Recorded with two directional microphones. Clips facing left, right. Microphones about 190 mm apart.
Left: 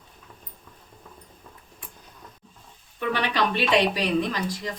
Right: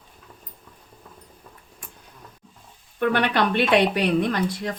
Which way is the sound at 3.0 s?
60° right (ahead or behind).